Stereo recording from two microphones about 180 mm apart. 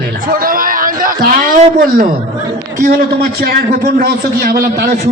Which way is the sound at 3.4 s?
60° right (ahead or behind).